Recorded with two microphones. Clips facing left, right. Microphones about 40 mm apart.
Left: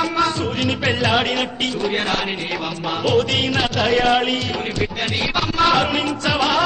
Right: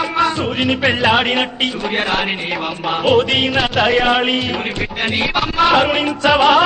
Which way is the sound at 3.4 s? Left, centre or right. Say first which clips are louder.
Right 4 dB; centre.